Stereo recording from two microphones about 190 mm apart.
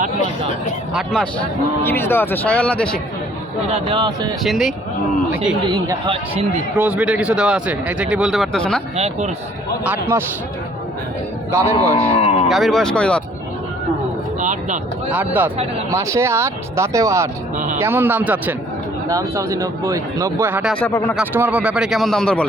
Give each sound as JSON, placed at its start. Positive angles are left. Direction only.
{"t": 0.9, "sound": "speech", "side_deg": 5}
{"t": 3.7, "sound": "speech", "side_deg": -30}
{"t": 4.4, "sound": "speech", "side_deg": 0}
{"t": 5.7, "sound": "speech", "side_deg": -25}
{"t": 6.7, "sound": "speech", "side_deg": -10}
{"t": 9.0, "sound": "speech", "side_deg": -35}
{"t": 9.8, "sound": "speech", "side_deg": -10}
{"t": 11.5, "sound": "speech", "side_deg": -15}
{"t": 11.9, "sound": "a sound", "side_deg": 30}
{"t": 12.5, "sound": "speech", "side_deg": 0}
{"t": 14.3, "sound": "speech", "side_deg": -40}
{"t": 15.1, "sound": "speech", "side_deg": -10}
{"t": 20.7, "sound": "speech", "side_deg": 10}
{"t": 21.2, "sound": "speech", "side_deg": -10}